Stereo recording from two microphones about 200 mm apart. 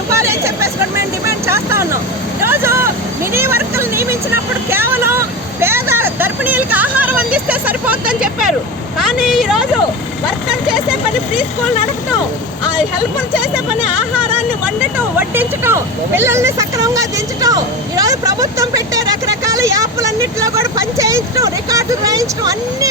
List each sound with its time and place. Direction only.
0.1 s vehicle: 15° right (ahead or behind)
3.3 s speech: 10° right (ahead or behind)
4.7 s vehicle: 10° right (ahead or behind)
9.0 s a woman's voice: 5° right (ahead or behind)
14.2 s speech: 10° right (ahead or behind)